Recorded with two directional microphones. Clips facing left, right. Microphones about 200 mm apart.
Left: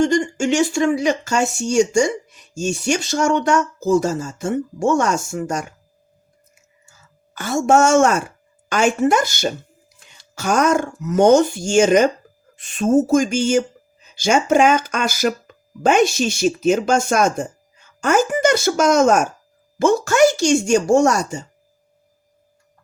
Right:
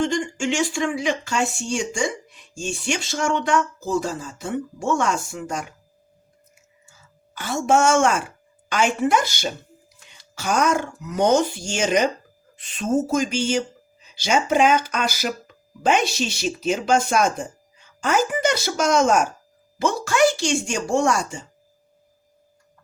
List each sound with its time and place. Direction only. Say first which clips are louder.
0.0 s speech: left 6 dB; 45° left (ahead or behind)
7.3 s speech: left 4 dB; 45° left (ahead or behind)